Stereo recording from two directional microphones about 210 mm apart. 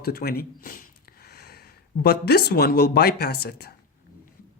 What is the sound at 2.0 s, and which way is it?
Speech, 50° left (ahead or behind).